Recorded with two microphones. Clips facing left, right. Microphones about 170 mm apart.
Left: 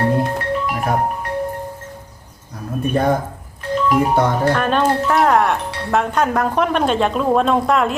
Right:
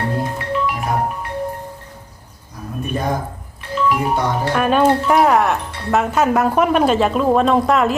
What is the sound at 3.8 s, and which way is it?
Speech, 55° left (ahead or behind).